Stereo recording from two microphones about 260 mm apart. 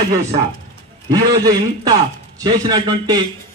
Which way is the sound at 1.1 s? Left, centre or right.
Centre.